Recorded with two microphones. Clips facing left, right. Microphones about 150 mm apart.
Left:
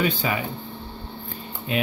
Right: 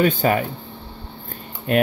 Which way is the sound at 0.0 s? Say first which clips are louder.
Right 6 dB; 50° right (ahead or behind).